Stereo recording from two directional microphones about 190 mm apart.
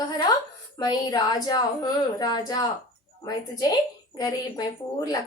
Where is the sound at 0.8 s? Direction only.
20° left (ahead or behind).